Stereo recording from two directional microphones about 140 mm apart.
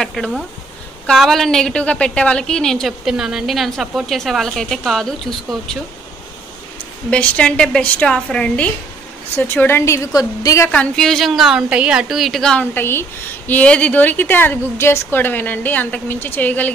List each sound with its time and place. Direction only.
0.0 s a sound: centre (ahead or behind)
1.0 s a woman's voice: centre (ahead or behind)
7.1 s a woman's voice: 10° left (ahead or behind); by 10.7 s 25° left (ahead or behind)
10.7 s a woman's voice: 5° left (ahead or behind)
12.7 s a woman's voice: 15° left (ahead or behind)